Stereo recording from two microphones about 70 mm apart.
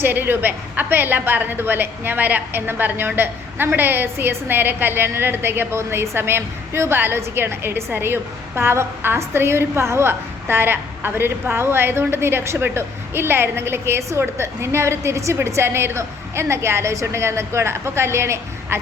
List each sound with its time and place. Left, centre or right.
0.0 s a woman's voice: right